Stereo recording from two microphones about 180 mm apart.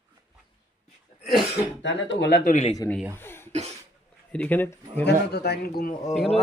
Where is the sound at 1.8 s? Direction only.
80° left.